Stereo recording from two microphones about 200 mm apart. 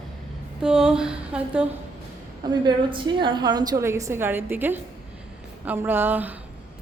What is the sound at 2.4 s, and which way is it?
A woman's voice, 20° right (ahead or behind).